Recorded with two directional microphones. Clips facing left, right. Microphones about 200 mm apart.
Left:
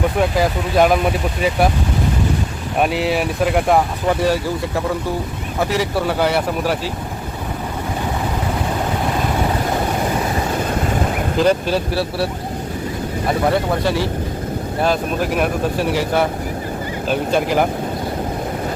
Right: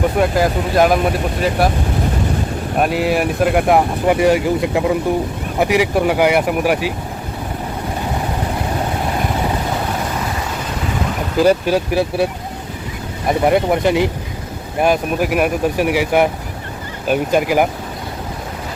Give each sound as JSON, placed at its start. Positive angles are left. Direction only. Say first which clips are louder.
{"t": 0.2, "sound": "speech", "louder": "right 2 dB", "side_deg": 0}
{"t": 2.9, "sound": "speech", "louder": "right 2 dB", "side_deg": -50}
{"t": 3.2, "sound": "speech", "louder": "right 2 dB", "side_deg": -5}
{"t": 3.8, "sound": "speech", "louder": "right 3 dB", "side_deg": -15}
{"t": 11.3, "sound": "speech", "louder": "right 3 dB", "side_deg": -10}